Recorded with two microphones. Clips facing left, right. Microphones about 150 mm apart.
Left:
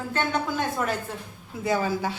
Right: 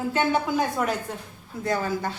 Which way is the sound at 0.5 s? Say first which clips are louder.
Right 2 dB; centre (ahead or behind).